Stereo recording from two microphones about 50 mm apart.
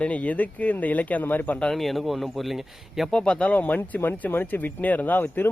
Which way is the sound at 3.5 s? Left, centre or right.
Left.